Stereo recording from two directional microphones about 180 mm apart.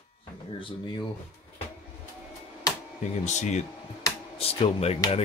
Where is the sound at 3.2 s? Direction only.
40° left (ahead or behind).